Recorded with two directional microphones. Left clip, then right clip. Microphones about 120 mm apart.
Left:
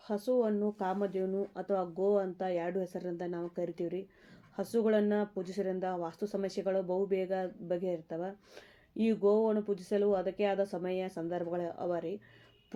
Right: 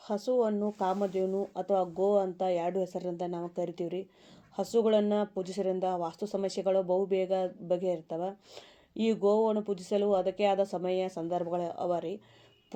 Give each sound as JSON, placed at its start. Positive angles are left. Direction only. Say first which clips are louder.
{"t": 0.1, "sound": "speech", "louder": "right 2 dB", "side_deg": -45}
{"t": 1.3, "sound": "speech", "louder": "right 4 dB", "side_deg": -30}